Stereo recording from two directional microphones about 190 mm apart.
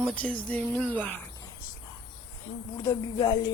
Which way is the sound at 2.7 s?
20° left (ahead or behind).